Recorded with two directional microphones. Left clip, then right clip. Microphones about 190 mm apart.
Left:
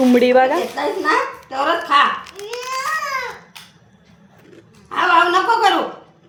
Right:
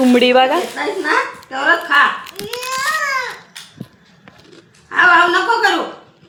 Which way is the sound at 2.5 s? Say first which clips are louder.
Right 2 dB; 5° left (ahead or behind).